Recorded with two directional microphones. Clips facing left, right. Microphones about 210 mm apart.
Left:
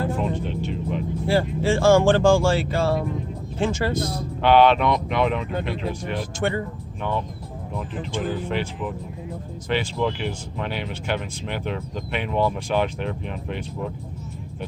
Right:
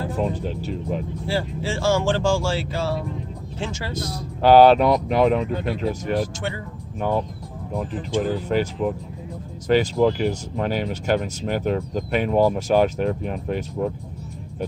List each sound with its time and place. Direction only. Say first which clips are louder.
0.2 s speech: right 1 dB; 40° right (ahead or behind)
1.3 s speech: left 5 dB; 55° left (ahead or behind)
4.4 s speech: right 4 dB; 40° right (ahead or behind)